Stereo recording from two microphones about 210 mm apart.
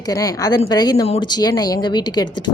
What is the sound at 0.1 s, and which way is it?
A woman's voice, 15° left (ahead or behind).